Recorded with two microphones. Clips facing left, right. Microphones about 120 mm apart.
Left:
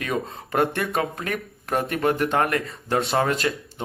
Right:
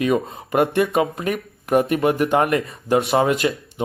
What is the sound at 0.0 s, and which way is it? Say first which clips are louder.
Speech: right 7 dB; 15° right (ahead or behind).